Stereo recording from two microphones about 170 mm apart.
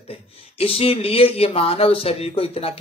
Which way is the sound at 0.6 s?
35° left (ahead or behind).